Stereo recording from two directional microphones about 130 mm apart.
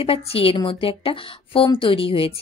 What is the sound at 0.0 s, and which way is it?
Speech, 50° left (ahead or behind).